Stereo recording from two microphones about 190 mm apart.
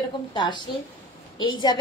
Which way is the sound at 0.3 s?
25° left (ahead or behind).